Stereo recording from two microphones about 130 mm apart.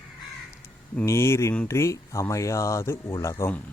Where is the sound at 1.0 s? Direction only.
20° left (ahead or behind).